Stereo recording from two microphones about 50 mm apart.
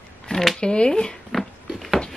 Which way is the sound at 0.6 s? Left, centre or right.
Centre.